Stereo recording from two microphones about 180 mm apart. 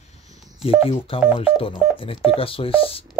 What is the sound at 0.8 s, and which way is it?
Speech, 30° left (ahead or behind).